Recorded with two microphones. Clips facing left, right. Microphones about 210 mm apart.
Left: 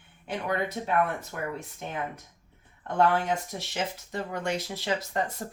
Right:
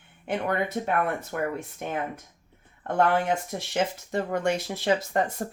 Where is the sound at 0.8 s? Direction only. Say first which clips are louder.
Right 1 dB; 50° right (ahead or behind).